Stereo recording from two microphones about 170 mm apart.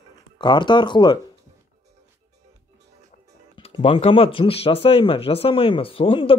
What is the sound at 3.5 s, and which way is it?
Speech, 30° left (ahead or behind).